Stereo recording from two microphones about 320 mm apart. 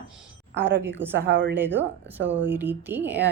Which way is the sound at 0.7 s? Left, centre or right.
Right.